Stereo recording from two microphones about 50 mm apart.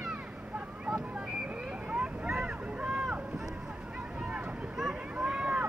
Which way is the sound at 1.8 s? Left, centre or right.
Right.